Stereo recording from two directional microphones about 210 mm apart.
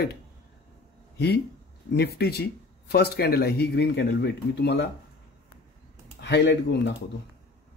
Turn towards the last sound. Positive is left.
turn(degrees=55)  # may be behind; listen again after turning